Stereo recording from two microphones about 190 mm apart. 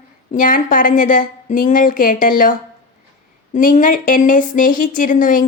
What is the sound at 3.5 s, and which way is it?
A woman's voice, 45° left (ahead or behind).